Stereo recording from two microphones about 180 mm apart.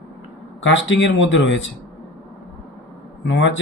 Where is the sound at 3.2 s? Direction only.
90° left.